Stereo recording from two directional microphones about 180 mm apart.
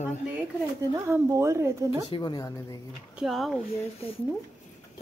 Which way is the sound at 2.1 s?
25° left (ahead or behind).